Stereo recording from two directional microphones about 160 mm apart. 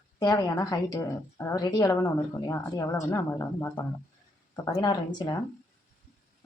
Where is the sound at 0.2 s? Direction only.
25° left (ahead or behind).